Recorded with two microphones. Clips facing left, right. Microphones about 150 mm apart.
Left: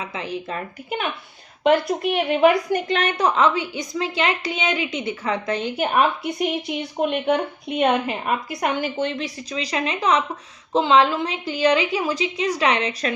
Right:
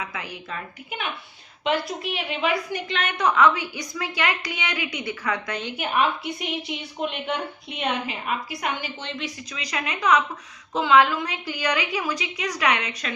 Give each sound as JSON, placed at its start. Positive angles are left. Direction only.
{"t": 0.0, "sound": "a woman's voice", "side_deg": 25}
{"t": 0.5, "sound": "a woman's voice", "side_deg": 40}
{"t": 5.7, "sound": "a woman's voice", "side_deg": 40}
{"t": 9.2, "sound": "a woman's voice", "side_deg": 30}